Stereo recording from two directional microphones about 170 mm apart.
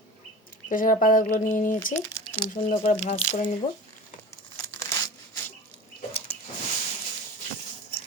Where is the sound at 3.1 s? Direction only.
45° left (ahead or behind).